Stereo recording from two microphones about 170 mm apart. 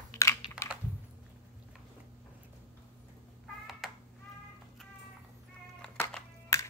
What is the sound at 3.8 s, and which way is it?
Cat, centre (ahead or behind).